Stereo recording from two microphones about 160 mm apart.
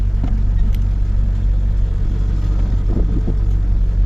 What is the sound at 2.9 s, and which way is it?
Vehicle, centre (ahead or behind).